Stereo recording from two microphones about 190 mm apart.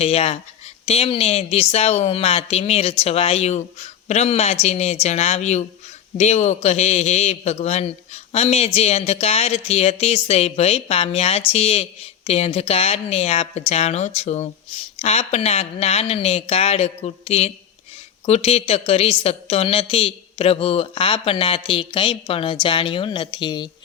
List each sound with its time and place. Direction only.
0.0 s a man's voice: 30° left (ahead or behind)